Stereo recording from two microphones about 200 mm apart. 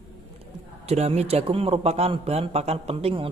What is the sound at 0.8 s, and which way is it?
A man's voice, 30° right (ahead or behind).